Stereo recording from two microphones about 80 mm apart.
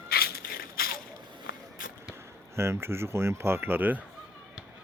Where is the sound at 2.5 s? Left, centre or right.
Right.